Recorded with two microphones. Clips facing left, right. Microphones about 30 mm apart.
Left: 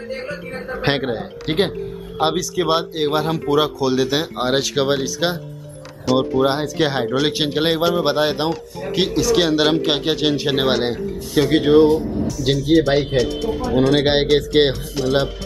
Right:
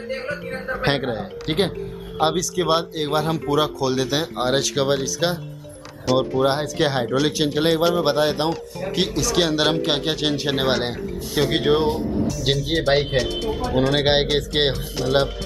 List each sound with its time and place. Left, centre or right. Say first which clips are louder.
0.8 s speech: left 3 dB; centre
7.2 s speech: left 1 dB; left; by 15.1 s centre